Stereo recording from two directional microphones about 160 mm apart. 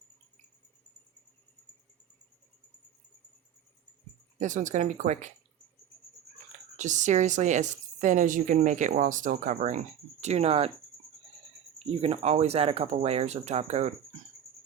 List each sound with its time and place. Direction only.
4.4 s a woman's voice: 50° right (ahead or behind)
6.7 s a woman's voice: 50° right (ahead or behind)
11.8 s speech: 40° right (ahead or behind)